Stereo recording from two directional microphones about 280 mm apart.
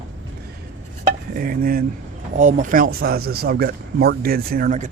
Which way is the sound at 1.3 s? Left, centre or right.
Right.